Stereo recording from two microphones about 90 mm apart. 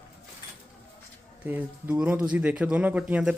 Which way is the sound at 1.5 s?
20° right (ahead or behind).